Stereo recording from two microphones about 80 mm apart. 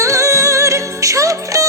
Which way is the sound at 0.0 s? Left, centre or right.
Right.